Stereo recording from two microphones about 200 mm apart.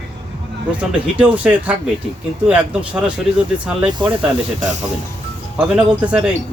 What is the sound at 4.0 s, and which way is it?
Speech, 25° right (ahead or behind).